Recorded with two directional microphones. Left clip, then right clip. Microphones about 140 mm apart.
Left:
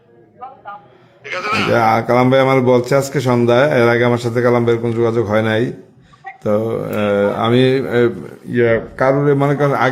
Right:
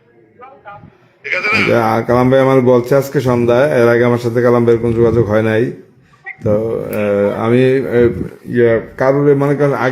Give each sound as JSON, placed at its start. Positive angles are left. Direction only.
{"t": 1.2, "sound": "a man's voice", "side_deg": 0}
{"t": 1.9, "sound": "a man's voice", "side_deg": -30}
{"t": 6.4, "sound": "speech", "side_deg": -15}
{"t": 7.3, "sound": "a man's voice", "side_deg": -25}